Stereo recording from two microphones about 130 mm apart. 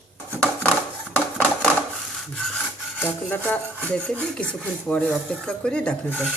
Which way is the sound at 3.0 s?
15° left (ahead or behind).